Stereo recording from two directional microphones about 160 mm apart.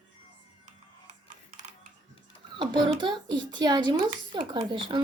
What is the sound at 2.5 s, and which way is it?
A child's voice, 30° right (ahead or behind).